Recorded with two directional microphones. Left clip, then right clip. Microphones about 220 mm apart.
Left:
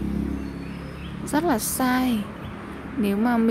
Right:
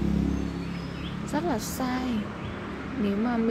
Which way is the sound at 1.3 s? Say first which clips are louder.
Left 6 dB; 20° left (ahead or behind).